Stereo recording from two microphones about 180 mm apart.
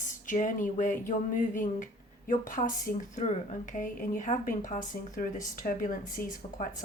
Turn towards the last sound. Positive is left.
turn(degrees=50)  # may be behind; listen again after turning